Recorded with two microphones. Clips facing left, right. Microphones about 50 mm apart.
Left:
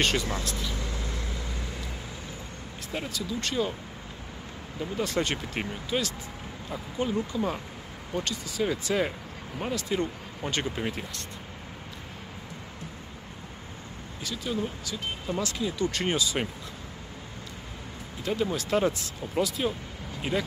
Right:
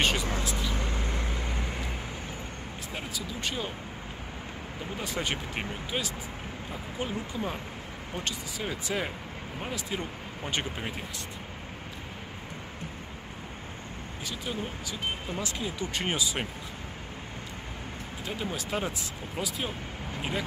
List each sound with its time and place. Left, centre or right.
0.0 s speech: centre
0.7 s vehicle: right
2.9 s speech: centre
4.9 s speech: centre
14.2 s speech: right
18.2 s speech: centre